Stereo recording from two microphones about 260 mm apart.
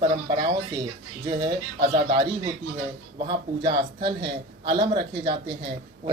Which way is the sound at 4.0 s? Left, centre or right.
Centre.